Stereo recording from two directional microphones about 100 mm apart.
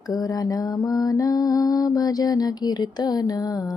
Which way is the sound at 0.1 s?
40° left (ahead or behind).